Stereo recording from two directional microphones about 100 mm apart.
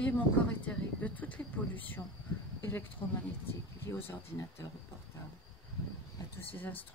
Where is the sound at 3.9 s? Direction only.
25° left (ahead or behind).